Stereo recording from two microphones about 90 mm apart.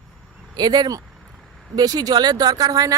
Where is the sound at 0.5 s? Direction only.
50° right (ahead or behind).